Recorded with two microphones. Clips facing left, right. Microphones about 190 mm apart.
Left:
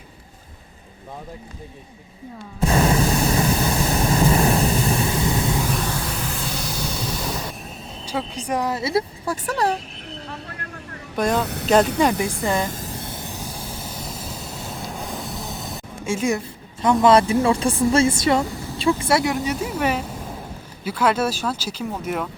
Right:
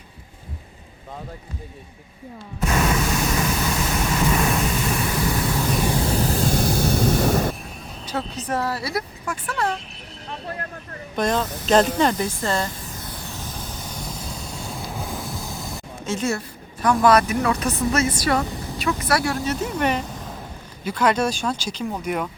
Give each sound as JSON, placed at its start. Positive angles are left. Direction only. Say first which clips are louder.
{"t": 2.6, "sound": "a sound", "louder": "left 3 dB", "side_deg": 30}
{"t": 5.8, "sound": "a sound", "louder": "right 5 dB", "side_deg": -20}
{"t": 6.1, "sound": "a sound", "louder": "right 7 dB", "side_deg": -35}
{"t": 8.0, "sound": "speech", "louder": "left 1 dB", "side_deg": 10}
{"t": 11.2, "sound": "speech", "louder": "left 1 dB", "side_deg": 10}
{"t": 11.4, "sound": "speech", "louder": "left 4 dB", "side_deg": 65}
{"t": 12.2, "sound": "speech", "louder": "left 2 dB", "side_deg": 15}
{"t": 12.7, "sound": "vehicle", "louder": "left 4 dB", "side_deg": 35}
{"t": 16.0, "sound": "speech", "louder": "left 2 dB", "side_deg": 10}
{"t": 18.4, "sound": "vehicle", "louder": "even", "side_deg": -20}
{"t": 18.8, "sound": "speech", "louder": "left 3 dB", "side_deg": 30}
{"t": 19.5, "sound": "speech", "louder": "even", "side_deg": 5}